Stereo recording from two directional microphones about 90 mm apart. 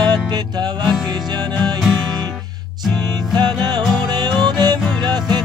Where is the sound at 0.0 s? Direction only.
50° right (ahead or behind).